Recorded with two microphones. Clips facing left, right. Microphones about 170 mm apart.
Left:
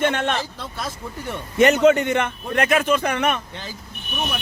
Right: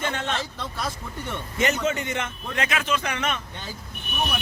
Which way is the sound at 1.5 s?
65° left (ahead or behind).